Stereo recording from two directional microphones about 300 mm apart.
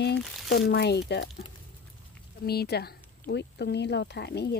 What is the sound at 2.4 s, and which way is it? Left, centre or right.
Speech, left.